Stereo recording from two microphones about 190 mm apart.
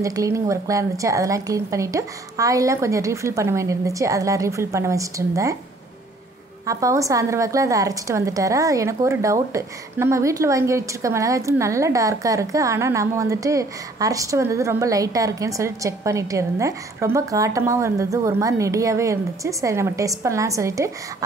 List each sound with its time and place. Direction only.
0.0 s a woman's voice: 15° right (ahead or behind)
6.6 s a woman's voice: 15° right (ahead or behind)